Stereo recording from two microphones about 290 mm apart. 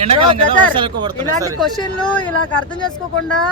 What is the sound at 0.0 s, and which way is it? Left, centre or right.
Speech, right.